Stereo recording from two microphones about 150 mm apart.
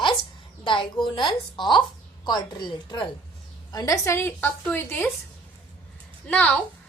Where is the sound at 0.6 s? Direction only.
35° left (ahead or behind); by 5.1 s 15° left (ahead or behind).